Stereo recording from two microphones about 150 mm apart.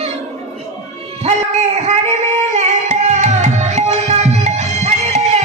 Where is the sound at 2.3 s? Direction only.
50° right (ahead or behind).